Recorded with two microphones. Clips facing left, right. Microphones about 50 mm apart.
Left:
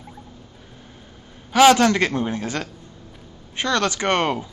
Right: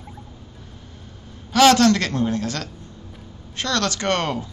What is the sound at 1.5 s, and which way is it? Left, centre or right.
Speech, centre.